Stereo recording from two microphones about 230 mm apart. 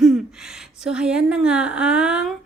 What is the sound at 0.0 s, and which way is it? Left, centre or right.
A woman's voice, centre.